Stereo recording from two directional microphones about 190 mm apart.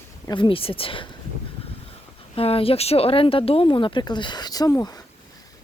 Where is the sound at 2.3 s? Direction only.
30° left (ahead or behind).